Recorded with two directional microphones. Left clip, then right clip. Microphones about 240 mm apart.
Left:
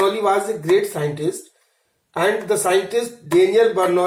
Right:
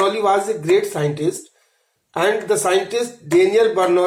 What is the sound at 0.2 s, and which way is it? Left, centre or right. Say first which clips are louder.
A man's voice: right 1 dB; right.